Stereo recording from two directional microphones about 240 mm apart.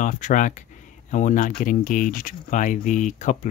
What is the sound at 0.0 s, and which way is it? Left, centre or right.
Speech, left.